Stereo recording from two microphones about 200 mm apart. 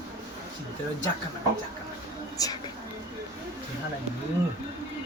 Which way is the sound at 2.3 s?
20° left (ahead or behind).